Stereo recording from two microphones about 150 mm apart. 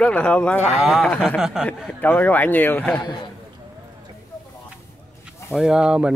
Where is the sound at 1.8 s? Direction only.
10° left (ahead or behind).